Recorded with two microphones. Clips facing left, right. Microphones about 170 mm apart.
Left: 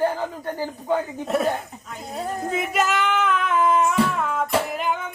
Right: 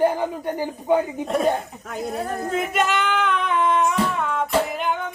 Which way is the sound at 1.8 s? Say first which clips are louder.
Right 6 dB; 60° right (ahead or behind).